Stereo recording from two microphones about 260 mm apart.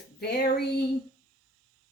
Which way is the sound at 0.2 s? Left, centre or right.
Left.